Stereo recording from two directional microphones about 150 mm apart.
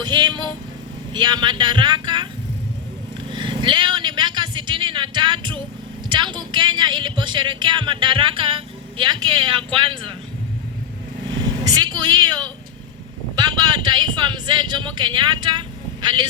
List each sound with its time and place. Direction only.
0.0 s vehicle: 30° right (ahead or behind)
1.1 s speech: 30° right (ahead or behind)
3.3 s vehicle: 30° right (ahead or behind)
6.1 s speech: 30° right (ahead or behind)
11.3 s vehicle: 30° right (ahead or behind)
13.7 s speech: 30° right (ahead or behind)